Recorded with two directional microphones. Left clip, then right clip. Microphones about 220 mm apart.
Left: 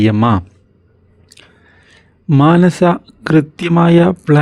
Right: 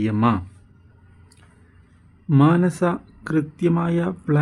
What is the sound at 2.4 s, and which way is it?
Speech, 35° left (ahead or behind).